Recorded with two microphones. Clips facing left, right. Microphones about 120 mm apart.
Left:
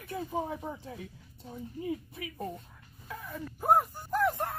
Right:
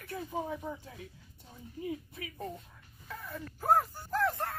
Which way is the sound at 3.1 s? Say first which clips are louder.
Left 2 dB; 5° left (ahead or behind).